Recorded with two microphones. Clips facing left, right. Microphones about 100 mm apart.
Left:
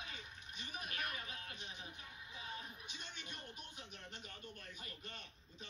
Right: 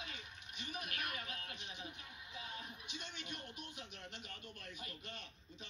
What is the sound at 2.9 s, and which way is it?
A man's voice, 40° left (ahead or behind).